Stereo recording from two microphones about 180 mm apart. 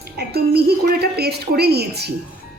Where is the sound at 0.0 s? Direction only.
60° right (ahead or behind).